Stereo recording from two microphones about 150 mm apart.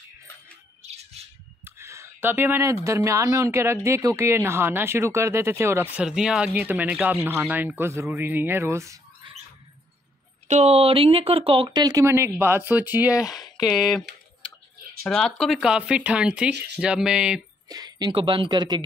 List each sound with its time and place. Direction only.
1.6 s a woman's voice: 20° right (ahead or behind)
6.0 s a woman's voice: 5° right (ahead or behind)
9.2 s squawk: 35° right (ahead or behind)
10.5 s speech: 45° right (ahead or behind); by 14.0 s centre (ahead or behind)
15.0 s a woman's voice: 5° left (ahead or behind)
17.6 s speech: 25° right (ahead or behind)